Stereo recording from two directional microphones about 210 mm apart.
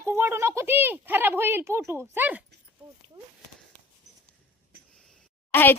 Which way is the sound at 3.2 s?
30° right (ahead or behind).